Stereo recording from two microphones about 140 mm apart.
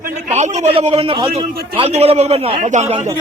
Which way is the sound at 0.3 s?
45° right (ahead or behind).